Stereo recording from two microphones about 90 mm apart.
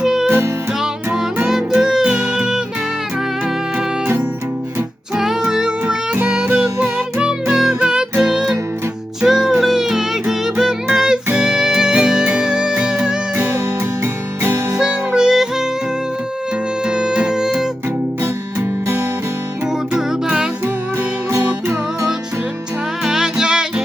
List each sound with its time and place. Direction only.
0.0 s music: 5° right (ahead or behind)
0.3 s music: 25° right (ahead or behind)
0.8 s music: 5° right (ahead or behind)
5.1 s music: 5° right (ahead or behind)
13.3 s music: 25° right (ahead or behind)
14.8 s music: 10° right (ahead or behind)
16.8 s music: 10° right (ahead or behind)
20.0 s music: 10° right (ahead or behind)
23.0 s music: 5° right (ahead or behind)